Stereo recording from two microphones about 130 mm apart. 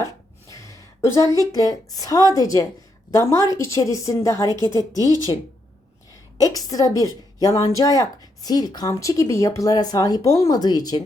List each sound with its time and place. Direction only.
0.0 s a sound: 25° left (ahead or behind)
1.5 s a woman's voice: 30° left (ahead or behind)
6.3 s a woman's voice: 25° left (ahead or behind)